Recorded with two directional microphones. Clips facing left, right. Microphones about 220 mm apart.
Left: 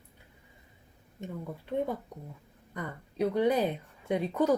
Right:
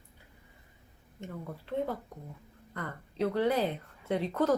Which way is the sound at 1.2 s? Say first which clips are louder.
Left 2 dB; 15° left (ahead or behind).